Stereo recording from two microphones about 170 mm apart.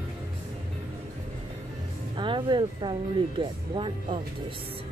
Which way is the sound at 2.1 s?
30° right (ahead or behind).